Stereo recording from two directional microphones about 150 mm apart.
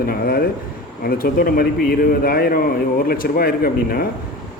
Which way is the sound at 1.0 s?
80° left.